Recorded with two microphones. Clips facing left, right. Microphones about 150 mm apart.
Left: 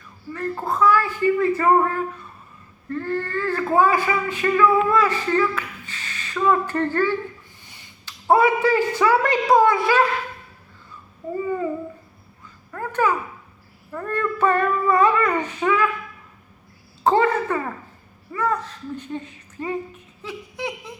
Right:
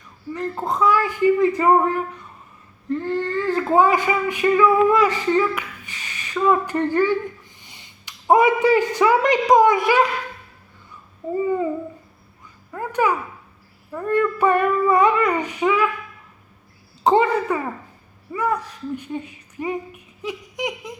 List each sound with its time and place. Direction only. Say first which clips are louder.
0.3 s a man's voice: even; 20° right (ahead or behind)
11.3 s babbling: right 3 dB; 20° right (ahead or behind)
12.7 s a child's voice: right 1 dB; 15° right (ahead or behind)
17.0 s speech: right 1 dB; 15° right (ahead or behind)